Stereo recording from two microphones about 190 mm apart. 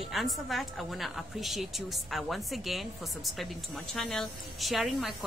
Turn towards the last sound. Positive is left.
turn(degrees=0)  # may be behind; listen again after turning